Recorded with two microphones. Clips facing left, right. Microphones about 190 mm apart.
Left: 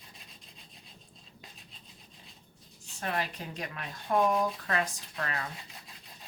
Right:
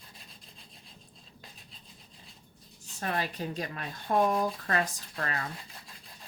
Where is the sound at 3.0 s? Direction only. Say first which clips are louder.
Right 2 dB; 35° right (ahead or behind).